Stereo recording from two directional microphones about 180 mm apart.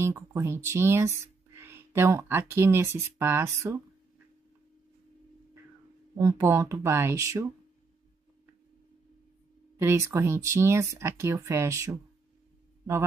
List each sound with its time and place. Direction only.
0.0 s speech: 15° right (ahead or behind)
6.1 s speech: 15° right (ahead or behind)
9.8 s speech: 15° right (ahead or behind)